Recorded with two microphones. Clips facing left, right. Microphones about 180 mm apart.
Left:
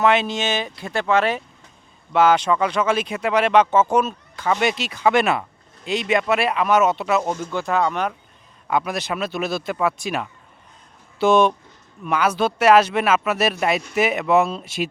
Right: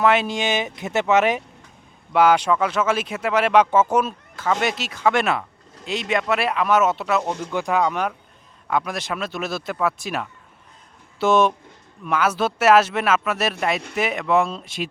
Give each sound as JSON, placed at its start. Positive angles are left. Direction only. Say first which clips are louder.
{"t": 0.0, "sound": "speech", "louder": "even", "side_deg": -10}
{"t": 7.5, "sound": "speech", "louder": "right 1 dB", "side_deg": -15}
{"t": 8.6, "sound": "speech", "louder": "left 2 dB", "side_deg": 5}